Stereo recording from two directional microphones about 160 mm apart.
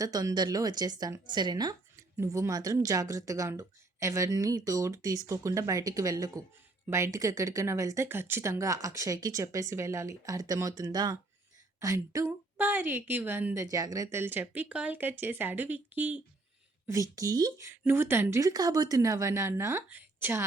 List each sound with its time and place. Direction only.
0.0 s a woman's voice: 20° right (ahead or behind)